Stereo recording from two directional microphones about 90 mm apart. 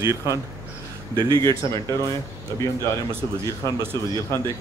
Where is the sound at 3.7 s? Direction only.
45° right (ahead or behind).